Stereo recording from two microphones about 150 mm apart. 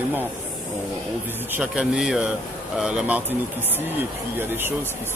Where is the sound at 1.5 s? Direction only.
5° right (ahead or behind).